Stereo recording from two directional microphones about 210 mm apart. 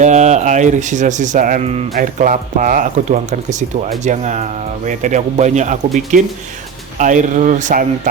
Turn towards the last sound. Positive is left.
turn(degrees=-35)  # may be behind; listen again after turning